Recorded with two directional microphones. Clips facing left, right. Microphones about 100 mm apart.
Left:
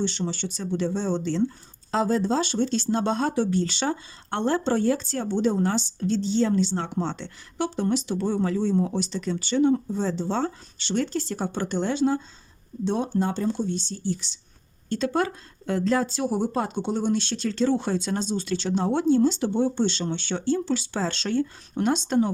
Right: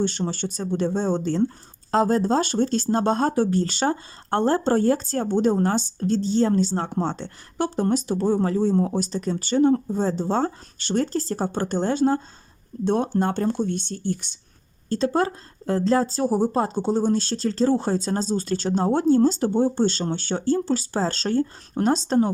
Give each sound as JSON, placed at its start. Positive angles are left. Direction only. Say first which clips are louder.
{"t": 0.0, "sound": "speech", "louder": "right 3 dB", "side_deg": -45}
{"t": 14.8, "sound": "speech", "louder": "right 3 dB", "side_deg": -35}